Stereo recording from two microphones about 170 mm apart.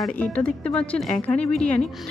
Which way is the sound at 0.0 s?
10° left (ahead or behind).